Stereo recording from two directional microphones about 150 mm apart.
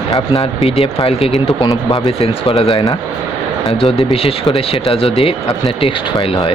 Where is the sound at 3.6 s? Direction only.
40° left (ahead or behind).